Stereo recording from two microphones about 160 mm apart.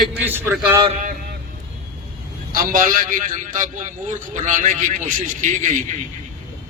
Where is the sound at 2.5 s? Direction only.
60° right (ahead or behind).